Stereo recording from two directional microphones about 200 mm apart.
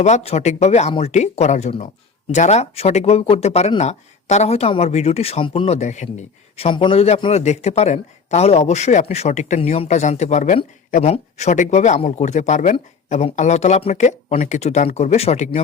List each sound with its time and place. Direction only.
0.0 s speech: 35° left (ahead or behind)